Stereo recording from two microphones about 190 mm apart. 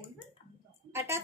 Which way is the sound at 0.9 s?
15° right (ahead or behind).